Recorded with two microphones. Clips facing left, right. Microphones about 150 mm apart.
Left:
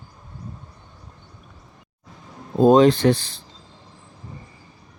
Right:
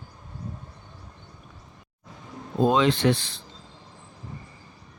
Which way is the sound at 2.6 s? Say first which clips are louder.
Left 7 dB; 40° left (ahead or behind).